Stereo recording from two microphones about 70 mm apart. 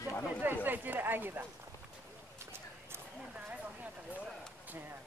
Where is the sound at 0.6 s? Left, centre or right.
Right.